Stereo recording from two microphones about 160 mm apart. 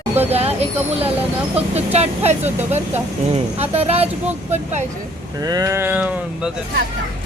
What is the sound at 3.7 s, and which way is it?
Speech, 40° right (ahead or behind).